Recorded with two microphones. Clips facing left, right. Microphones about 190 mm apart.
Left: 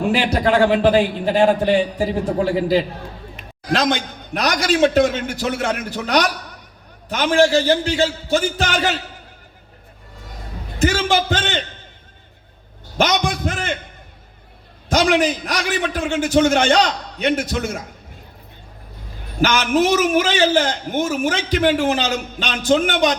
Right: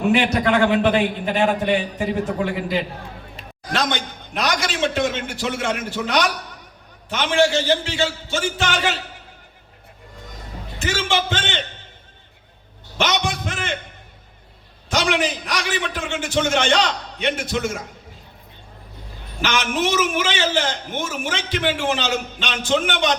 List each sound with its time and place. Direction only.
0.0 s a man's voice: 30° left (ahead or behind)
3.9 s a man's voice: 40° left (ahead or behind)
10.8 s a man's voice: 40° left (ahead or behind)
13.0 s a man's voice: 40° left (ahead or behind)
14.8 s a man's voice: 40° left (ahead or behind)
19.4 s a man's voice: 40° left (ahead or behind)